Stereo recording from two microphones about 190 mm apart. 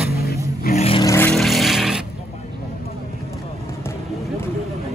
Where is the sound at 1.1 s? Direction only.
10° left (ahead or behind).